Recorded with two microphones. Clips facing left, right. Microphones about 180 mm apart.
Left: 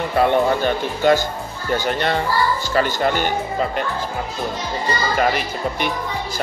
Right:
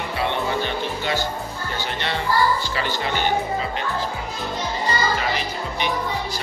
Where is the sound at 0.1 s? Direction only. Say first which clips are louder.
Left 8 dB; 50° left (ahead or behind).